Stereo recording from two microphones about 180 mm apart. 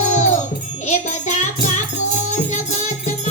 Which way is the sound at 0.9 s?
40° left (ahead or behind).